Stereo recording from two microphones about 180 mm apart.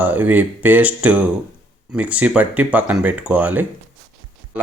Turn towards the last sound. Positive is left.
turn(degrees=-10)  # may be behind; listen again after turning